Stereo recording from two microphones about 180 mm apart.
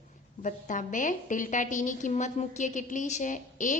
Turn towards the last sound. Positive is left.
turn(degrees=45)  # may be behind; listen again after turning